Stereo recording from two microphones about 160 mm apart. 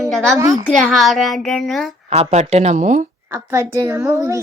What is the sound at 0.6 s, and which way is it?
A child's voice, centre (ahead or behind).